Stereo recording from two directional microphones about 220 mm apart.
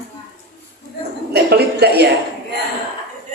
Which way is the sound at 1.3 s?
50° right (ahead or behind).